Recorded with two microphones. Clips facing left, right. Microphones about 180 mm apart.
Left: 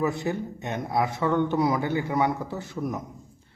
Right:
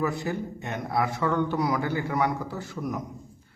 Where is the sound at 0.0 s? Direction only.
20° left (ahead or behind).